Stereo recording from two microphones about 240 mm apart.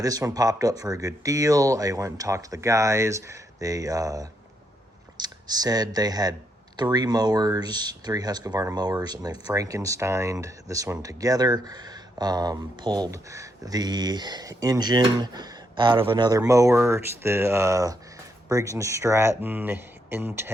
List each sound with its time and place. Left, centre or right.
0.0 s speech: centre